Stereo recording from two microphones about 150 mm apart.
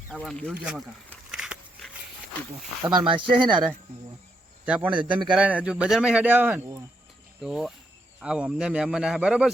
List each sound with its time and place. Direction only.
0.1 s speech: centre (ahead or behind)
1.3 s biting: 5° right (ahead or behind)
2.8 s speech: 35° right (ahead or behind)
4.6 s a man's voice: 10° right (ahead or behind)
4.9 s speech: 30° right (ahead or behind)
5.3 s speech: 10° right (ahead or behind)